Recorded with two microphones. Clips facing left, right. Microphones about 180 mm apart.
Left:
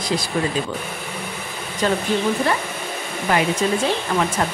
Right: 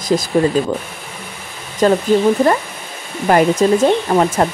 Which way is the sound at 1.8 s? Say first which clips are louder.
Right 8 dB; 40° right (ahead or behind).